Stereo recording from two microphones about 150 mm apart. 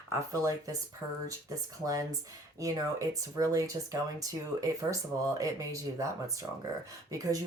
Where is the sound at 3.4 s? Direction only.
20° right (ahead or behind).